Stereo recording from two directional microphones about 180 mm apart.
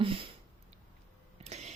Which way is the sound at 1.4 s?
40° right (ahead or behind).